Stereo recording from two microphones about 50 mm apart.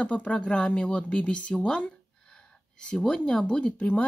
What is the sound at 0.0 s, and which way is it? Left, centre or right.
A woman's voice, left.